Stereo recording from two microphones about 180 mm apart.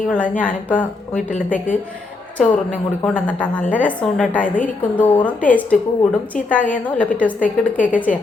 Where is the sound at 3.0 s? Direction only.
5° left (ahead or behind).